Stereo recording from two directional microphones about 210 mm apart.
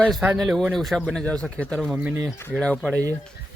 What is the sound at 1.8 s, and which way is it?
Speech, 5° right (ahead or behind).